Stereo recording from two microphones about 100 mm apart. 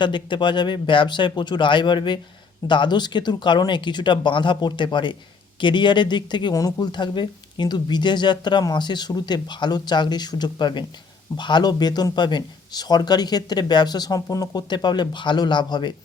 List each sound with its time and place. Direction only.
0.0 s speech: 50° left (ahead or behind)
6.5 s speech: 40° left (ahead or behind)